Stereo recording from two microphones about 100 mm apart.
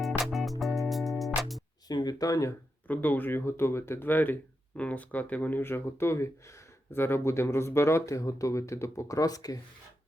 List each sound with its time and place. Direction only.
0.0 s music: centre (ahead or behind)
1.9 s a sound: 45° left (ahead or behind)
2.8 s speech: 15° left (ahead or behind); by 9.6 s 35° left (ahead or behind)